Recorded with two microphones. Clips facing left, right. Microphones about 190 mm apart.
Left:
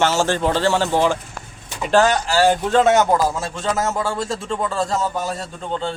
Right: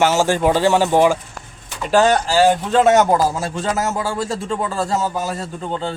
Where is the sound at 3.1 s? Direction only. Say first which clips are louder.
Right 2 dB; 40° right (ahead or behind).